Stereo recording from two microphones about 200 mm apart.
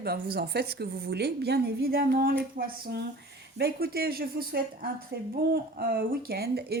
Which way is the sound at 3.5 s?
50° right (ahead or behind).